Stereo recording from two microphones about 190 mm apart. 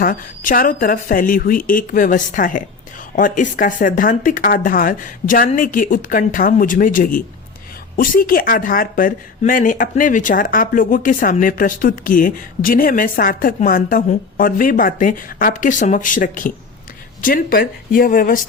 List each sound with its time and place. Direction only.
0.0 s speech: 50° left (ahead or behind)